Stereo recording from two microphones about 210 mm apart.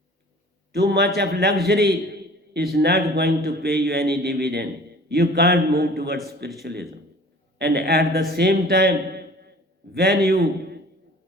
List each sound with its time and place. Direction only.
0.7 s a man's voice: 50° right (ahead or behind)